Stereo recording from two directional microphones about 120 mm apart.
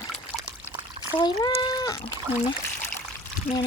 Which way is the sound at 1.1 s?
35° left (ahead or behind).